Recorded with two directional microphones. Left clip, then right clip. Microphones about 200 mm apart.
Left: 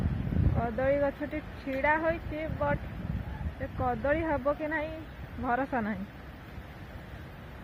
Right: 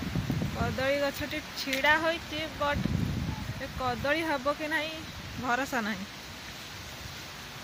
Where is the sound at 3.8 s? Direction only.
10° right (ahead or behind).